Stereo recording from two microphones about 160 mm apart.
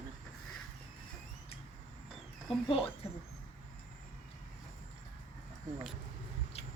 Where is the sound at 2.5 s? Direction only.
35° left (ahead or behind).